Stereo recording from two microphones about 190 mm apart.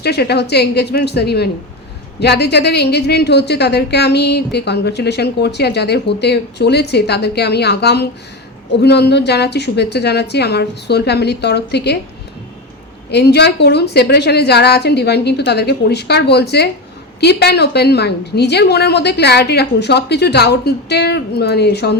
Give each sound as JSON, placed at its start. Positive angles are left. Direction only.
{"t": 0.0, "sound": "a woman's voice", "side_deg": 60}
{"t": 13.1, "sound": "a woman's voice", "side_deg": 60}